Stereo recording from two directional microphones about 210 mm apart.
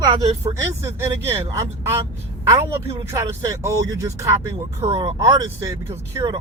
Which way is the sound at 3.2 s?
15° right (ahead or behind).